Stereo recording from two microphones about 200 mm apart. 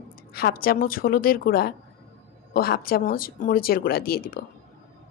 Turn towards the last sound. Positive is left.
turn(degrees=50)  # may be behind; listen again after turning